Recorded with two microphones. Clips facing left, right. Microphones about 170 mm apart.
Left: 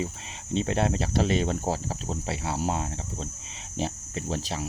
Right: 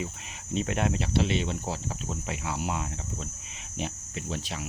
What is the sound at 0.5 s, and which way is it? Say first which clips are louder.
Speech: left 3 dB; 30° left (ahead or behind).